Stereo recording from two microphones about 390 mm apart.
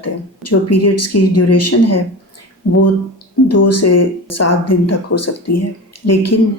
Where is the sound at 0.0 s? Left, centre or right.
Left.